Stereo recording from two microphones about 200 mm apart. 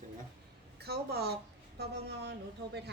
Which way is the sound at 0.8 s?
55° right (ahead or behind).